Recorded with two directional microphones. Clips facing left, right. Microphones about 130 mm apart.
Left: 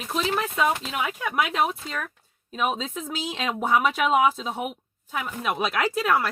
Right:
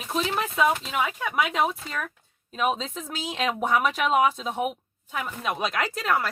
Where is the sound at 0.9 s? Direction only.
5° left (ahead or behind).